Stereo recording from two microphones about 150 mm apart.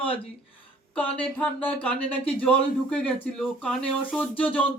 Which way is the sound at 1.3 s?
10° left (ahead or behind).